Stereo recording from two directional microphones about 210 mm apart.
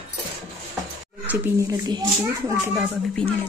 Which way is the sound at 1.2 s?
10° right (ahead or behind).